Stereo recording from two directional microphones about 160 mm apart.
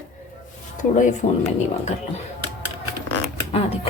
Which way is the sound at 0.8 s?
50° left (ahead or behind).